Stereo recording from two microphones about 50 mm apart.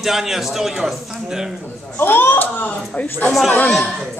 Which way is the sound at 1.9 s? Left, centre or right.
Left.